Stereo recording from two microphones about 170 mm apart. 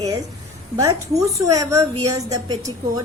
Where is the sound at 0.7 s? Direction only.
20° right (ahead or behind).